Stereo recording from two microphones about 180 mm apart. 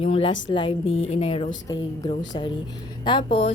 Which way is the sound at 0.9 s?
90° left.